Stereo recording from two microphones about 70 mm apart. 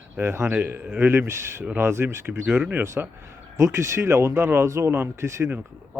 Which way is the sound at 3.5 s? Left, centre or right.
Right.